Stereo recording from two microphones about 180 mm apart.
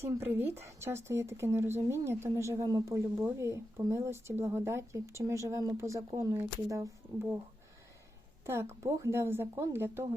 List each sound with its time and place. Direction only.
0.1 s speech: 15° right (ahead or behind)
8.4 s speech: 15° right (ahead or behind)